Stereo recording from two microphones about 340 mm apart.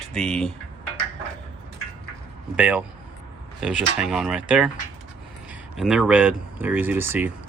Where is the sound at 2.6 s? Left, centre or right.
Centre.